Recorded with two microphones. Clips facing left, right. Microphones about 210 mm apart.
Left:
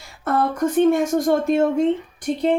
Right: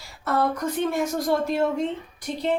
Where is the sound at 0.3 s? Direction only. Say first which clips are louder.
Left 4 dB; 50° left (ahead or behind).